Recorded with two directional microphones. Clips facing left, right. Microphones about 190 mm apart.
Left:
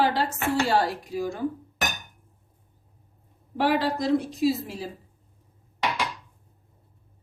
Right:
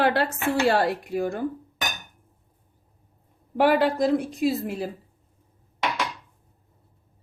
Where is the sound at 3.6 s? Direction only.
55° right (ahead or behind).